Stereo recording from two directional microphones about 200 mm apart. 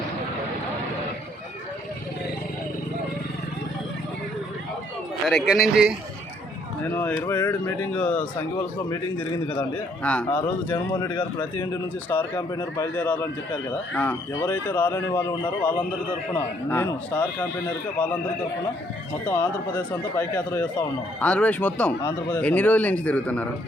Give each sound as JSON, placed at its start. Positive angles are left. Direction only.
{"t": 5.3, "sound": "a man's voice", "side_deg": 0}
{"t": 6.9, "sound": "speech", "side_deg": 10}
{"t": 8.5, "sound": "speech", "side_deg": 20}
{"t": 9.6, "sound": "speech", "side_deg": 5}
{"t": 10.9, "sound": "speech", "side_deg": 25}
{"t": 12.0, "sound": "speech", "side_deg": 10}
{"t": 19.2, "sound": "speech", "side_deg": 10}